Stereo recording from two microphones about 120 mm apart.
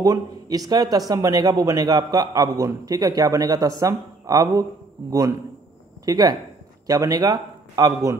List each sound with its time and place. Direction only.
0.0 s a man's voice: 30° right (ahead or behind)
6.0 s a man's voice: 30° right (ahead or behind)